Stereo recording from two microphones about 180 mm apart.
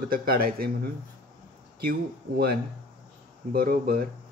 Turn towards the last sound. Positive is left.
turn(degrees=-55)  # may be behind; listen again after turning